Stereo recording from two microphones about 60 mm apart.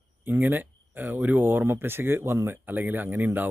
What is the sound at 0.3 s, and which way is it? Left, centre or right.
Speech, right.